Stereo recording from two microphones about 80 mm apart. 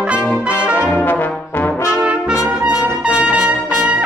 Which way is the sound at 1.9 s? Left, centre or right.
Centre.